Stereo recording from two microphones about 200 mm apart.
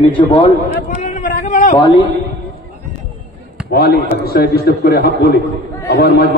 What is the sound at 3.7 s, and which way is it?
A man's voice, 50° left (ahead or behind).